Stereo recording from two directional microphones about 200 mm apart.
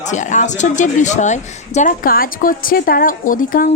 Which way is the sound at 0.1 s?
40° left (ahead or behind).